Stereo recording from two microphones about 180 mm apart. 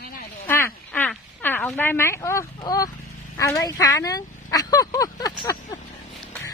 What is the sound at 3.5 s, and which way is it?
Speech, 20° left (ahead or behind).